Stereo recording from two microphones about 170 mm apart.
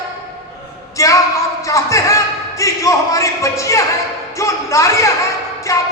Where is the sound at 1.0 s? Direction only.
20° left (ahead or behind).